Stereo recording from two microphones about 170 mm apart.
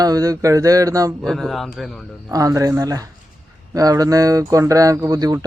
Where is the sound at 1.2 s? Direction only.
Centre (ahead or behind).